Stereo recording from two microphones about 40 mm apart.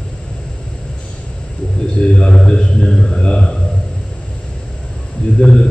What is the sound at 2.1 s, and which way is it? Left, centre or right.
A man's voice, centre.